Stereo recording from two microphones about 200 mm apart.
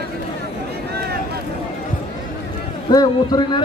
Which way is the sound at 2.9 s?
20° left (ahead or behind).